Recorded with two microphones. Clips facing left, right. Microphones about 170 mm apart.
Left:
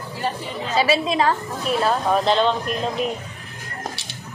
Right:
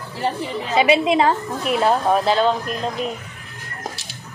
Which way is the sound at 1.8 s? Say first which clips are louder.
Right 2 dB; 10° right (ahead or behind).